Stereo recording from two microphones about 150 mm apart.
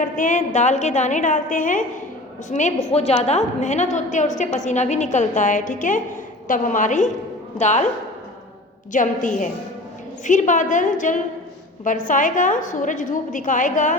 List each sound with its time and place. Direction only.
0.0 s a woman's voice: 60° left (ahead or behind)
8.9 s a woman's voice: 60° left (ahead or behind)